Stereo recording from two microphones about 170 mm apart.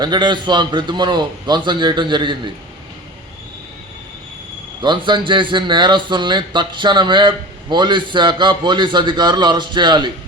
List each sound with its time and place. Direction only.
0.0 s speech: 25° right (ahead or behind)
4.8 s speech: 25° right (ahead or behind)